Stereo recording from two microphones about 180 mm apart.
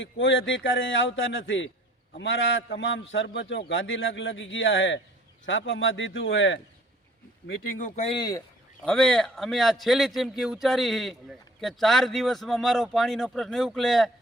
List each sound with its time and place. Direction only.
0.0 s a man's voice: 90° left
7.8 s speech: 45° left (ahead or behind)
8.0 s speech: 20° left (ahead or behind)
8.8 s a man's voice: 5° left (ahead or behind)